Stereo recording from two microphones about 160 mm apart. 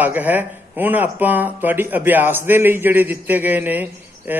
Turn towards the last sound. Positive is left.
turn(degrees=-10)  # may be behind; listen again after turning